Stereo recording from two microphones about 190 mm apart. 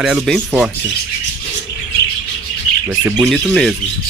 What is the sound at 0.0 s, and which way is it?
Speech, centre (ahead or behind).